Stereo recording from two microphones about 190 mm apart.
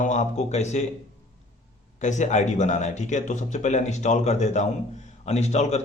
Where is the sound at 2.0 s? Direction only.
40° left (ahead or behind).